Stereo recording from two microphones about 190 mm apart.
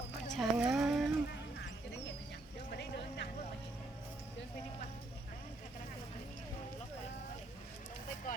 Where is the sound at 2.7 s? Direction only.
60° left (ahead or behind).